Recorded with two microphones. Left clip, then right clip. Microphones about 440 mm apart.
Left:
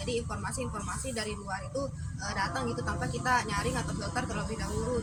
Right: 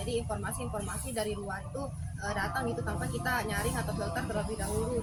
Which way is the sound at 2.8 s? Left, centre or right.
Right.